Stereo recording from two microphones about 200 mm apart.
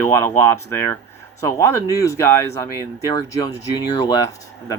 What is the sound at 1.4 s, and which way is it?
Speech, 15° left (ahead or behind).